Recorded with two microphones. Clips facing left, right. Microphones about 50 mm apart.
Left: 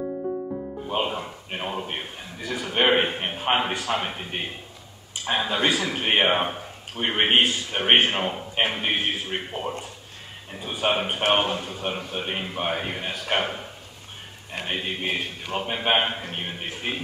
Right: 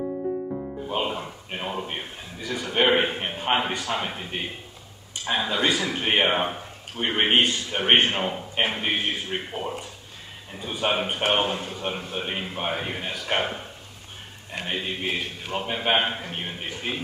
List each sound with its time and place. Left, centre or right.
0.8 s a man's voice: centre
14.7 s speech: centre
16.9 s a man's voice: left